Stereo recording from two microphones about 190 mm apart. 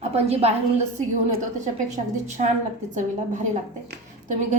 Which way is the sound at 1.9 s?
40° right (ahead or behind).